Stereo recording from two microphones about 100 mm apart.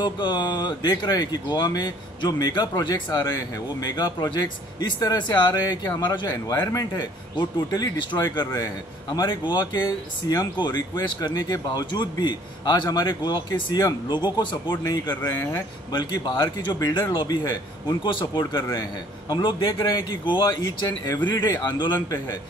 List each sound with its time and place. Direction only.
0.0 s speech: 50° left (ahead or behind)
15.9 s speech: 50° left (ahead or behind)